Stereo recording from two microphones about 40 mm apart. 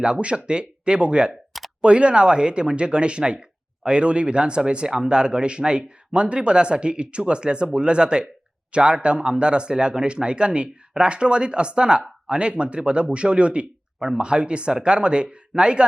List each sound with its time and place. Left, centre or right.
0.0 s speech: right